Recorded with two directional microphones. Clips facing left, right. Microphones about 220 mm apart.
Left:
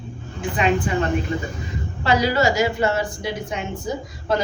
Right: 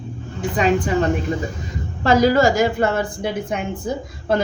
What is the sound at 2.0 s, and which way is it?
A woman's voice, 45° right (ahead or behind).